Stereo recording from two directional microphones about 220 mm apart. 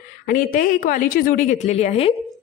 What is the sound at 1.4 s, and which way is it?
Speech, 30° left (ahead or behind).